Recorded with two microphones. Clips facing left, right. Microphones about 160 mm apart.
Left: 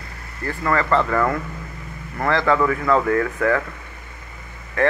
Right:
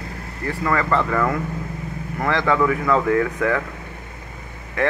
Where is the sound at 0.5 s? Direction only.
10° right (ahead or behind).